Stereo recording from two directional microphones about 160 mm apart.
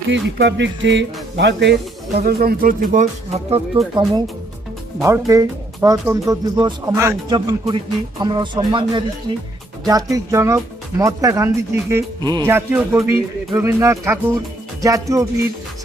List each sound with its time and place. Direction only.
0.1 s speech: 90° right
2.1 s speech: 70° right (ahead or behind); by 4.2 s 35° right (ahead or behind)
4.9 s speech: 20° right (ahead or behind)
7.3 s speech: 30° right (ahead or behind)